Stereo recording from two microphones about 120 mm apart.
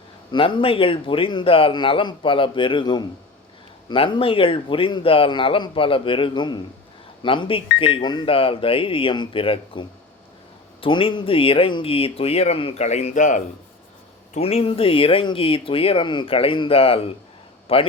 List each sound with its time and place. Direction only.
0.3 s a man's voice: 45° left (ahead or behind)
12.8 s a man's voice: 65° left (ahead or behind); by 13.4 s 90° left
14.3 s a man's voice: 55° left (ahead or behind)